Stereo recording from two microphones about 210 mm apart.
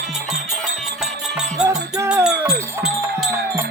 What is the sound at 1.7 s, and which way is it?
Music, 15° right (ahead or behind).